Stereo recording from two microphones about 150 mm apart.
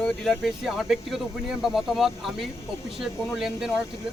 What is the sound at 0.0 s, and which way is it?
A man's voice, centre (ahead or behind).